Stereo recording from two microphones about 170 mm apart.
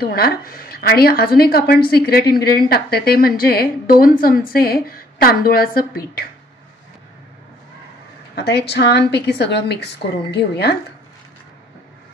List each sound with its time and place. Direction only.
0.0 s speech: 60° left (ahead or behind)
8.4 s a woman's voice: 80° left
10.0 s a woman's voice: 65° left (ahead or behind)